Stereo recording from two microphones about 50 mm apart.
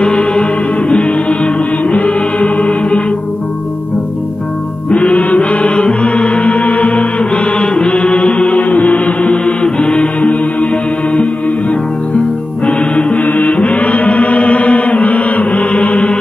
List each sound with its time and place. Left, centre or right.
0.0 s music: centre
4.9 s music: left
9.2 s music: centre
12.6 s music: left